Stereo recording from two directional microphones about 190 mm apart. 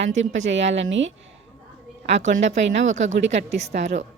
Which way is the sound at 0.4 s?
70° right (ahead or behind).